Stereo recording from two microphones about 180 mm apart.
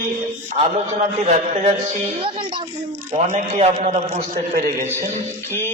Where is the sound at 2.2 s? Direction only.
30° right (ahead or behind).